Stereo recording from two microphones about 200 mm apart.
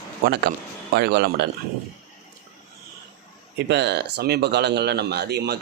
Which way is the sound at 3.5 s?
55° right (ahead or behind).